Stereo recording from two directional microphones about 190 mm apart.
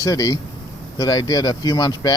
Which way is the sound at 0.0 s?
20° left (ahead or behind).